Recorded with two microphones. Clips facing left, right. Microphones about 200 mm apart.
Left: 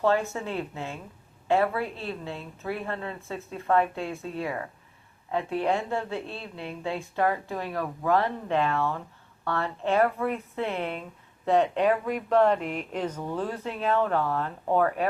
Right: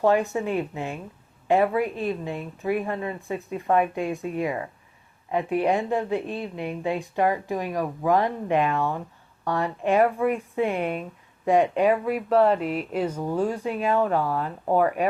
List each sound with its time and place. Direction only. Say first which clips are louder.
0.0 s speech: right 4 dB; 15° right (ahead or behind)